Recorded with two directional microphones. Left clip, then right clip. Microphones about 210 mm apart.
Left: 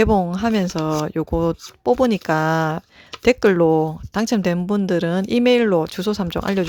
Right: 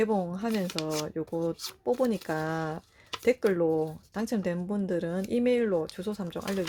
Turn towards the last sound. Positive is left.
turn(degrees=40)  # may be behind; listen again after turning